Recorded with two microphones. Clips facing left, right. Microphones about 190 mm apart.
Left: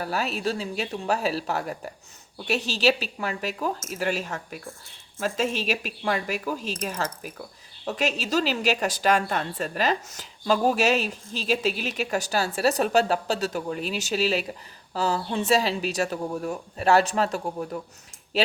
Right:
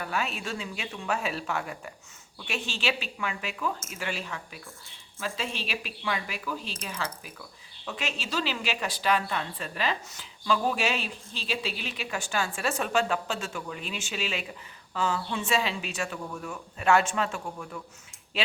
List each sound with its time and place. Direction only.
0.0 s a woman's voice: 35° left (ahead or behind)